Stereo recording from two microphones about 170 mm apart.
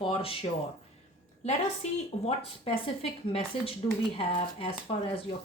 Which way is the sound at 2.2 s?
35° left (ahead or behind).